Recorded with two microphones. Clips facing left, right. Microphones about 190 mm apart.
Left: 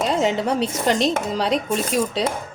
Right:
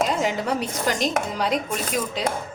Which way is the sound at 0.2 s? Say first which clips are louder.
Left 4 dB; 25° left (ahead or behind).